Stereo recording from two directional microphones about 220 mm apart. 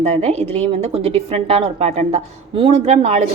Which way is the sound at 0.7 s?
25° right (ahead or behind).